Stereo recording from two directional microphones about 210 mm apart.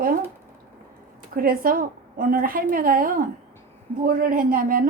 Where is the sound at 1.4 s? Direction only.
45° right (ahead or behind).